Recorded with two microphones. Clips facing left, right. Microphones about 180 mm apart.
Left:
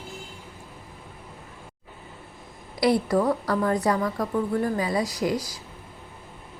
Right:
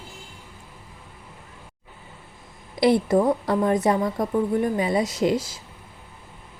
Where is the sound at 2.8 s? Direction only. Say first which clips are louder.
Right 3 dB; 25° right (ahead or behind).